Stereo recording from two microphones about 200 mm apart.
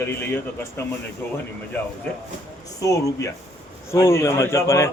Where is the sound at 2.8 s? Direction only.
15° left (ahead or behind).